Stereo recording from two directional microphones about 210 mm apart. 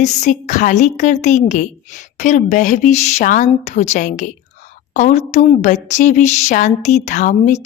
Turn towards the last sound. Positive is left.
turn(degrees=35)  # may be behind; listen again after turning